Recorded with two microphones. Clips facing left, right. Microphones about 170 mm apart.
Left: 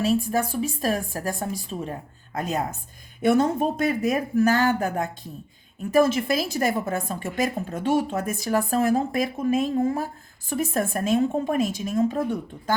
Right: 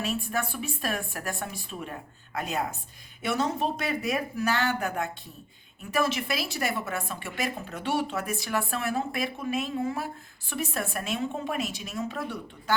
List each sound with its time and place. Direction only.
0.0 s speech: 35° left (ahead or behind)
2.3 s a woman's voice: 40° left (ahead or behind)